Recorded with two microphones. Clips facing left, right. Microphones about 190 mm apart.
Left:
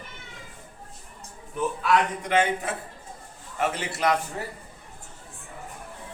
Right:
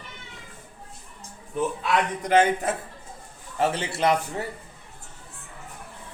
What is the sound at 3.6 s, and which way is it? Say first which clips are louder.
Speech: right 3 dB; 30° right (ahead or behind).